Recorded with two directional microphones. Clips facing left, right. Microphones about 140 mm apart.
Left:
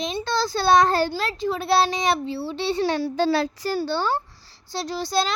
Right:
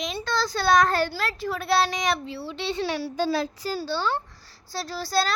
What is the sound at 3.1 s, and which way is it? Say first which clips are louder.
Speech: left 4 dB; 75° left (ahead or behind).